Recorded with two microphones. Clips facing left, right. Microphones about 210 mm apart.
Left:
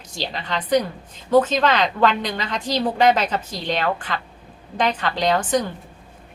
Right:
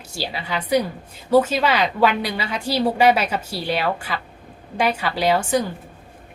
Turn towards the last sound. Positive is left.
turn(degrees=-10)  # may be behind; listen again after turning